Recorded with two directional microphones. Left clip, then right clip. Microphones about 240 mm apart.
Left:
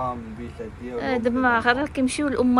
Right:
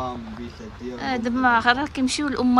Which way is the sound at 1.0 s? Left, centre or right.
Centre.